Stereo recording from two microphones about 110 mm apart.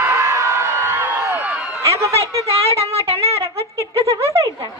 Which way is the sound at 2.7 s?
65° right (ahead or behind).